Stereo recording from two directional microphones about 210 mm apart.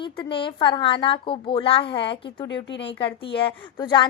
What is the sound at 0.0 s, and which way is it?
A woman's voice, 25° left (ahead or behind).